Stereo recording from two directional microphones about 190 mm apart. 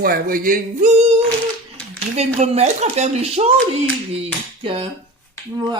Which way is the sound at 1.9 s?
35° right (ahead or behind).